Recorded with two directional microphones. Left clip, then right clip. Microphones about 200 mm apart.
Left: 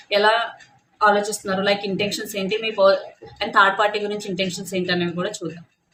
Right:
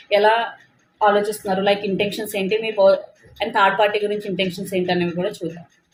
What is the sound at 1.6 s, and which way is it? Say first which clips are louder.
A woman's voice: right 2 dB; 20° left (ahead or behind).